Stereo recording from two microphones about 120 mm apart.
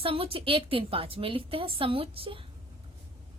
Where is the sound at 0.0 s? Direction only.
50° right (ahead or behind).